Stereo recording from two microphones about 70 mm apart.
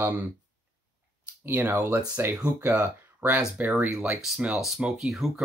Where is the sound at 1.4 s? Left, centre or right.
Right; by 5.3 s centre.